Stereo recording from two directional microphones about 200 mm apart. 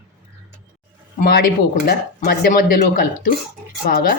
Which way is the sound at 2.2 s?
50° left (ahead or behind).